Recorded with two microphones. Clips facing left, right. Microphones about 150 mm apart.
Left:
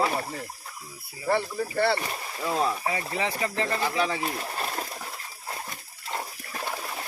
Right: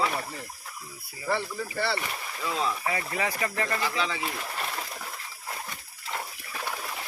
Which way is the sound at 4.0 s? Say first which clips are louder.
Left 4 dB; 45° left (ahead or behind).